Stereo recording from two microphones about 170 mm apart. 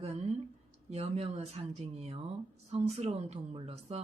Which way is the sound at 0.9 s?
40° right (ahead or behind).